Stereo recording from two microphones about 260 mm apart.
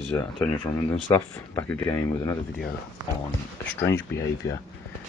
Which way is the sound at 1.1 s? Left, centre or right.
Centre.